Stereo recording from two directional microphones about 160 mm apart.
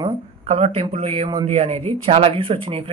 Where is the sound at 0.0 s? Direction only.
40° right (ahead or behind).